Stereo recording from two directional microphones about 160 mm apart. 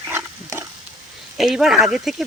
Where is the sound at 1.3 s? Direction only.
Centre (ahead or behind).